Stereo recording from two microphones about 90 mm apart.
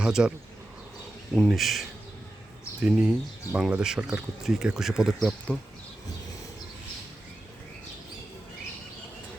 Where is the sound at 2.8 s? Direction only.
10° right (ahead or behind).